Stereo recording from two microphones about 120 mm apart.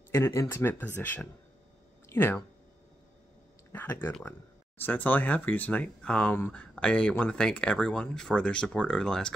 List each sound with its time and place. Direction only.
0.1 s speech: 25° left (ahead or behind)
3.7 s speech: 20° left (ahead or behind)